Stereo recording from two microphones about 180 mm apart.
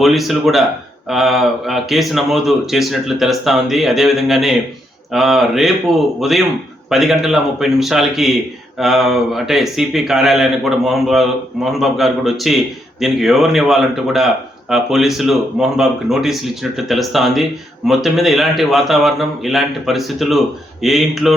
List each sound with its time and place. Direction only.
0.0 s speech: centre (ahead or behind)